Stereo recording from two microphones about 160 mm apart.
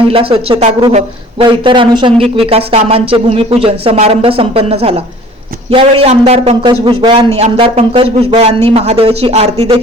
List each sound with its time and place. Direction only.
0.1 s speech: 35° right (ahead or behind)